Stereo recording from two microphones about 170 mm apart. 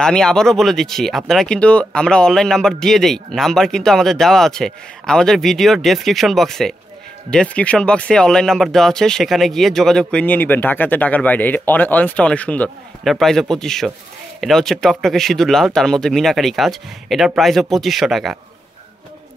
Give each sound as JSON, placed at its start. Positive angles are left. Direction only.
{"t": 0.0, "sound": "speech", "side_deg": 5}